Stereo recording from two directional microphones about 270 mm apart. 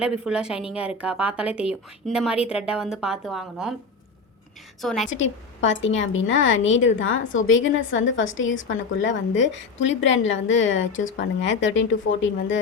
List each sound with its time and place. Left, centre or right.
0.0 s a woman's voice: centre
4.8 s a woman's voice: centre
5.0 s a woman's voice: left